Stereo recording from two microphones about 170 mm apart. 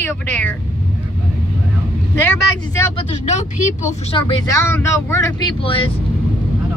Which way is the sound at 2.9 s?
45° left (ahead or behind).